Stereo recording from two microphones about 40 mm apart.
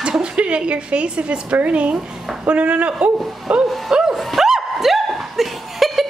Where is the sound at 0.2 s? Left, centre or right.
Right.